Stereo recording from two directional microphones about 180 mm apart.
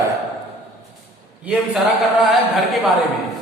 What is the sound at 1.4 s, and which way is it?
Speech, centre (ahead or behind).